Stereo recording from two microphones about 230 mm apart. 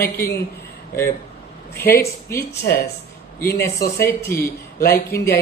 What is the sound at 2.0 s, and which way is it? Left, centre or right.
Speech, centre.